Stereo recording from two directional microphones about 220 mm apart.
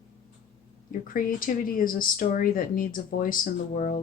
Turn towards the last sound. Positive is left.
turn(degrees=40)  # may be behind; listen again after turning